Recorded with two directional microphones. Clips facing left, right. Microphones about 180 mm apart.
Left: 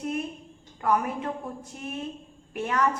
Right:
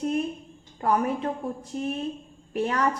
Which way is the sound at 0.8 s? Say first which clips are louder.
Right 2 dB; 35° right (ahead or behind).